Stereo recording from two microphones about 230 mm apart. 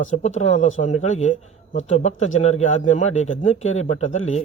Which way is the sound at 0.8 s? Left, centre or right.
Left.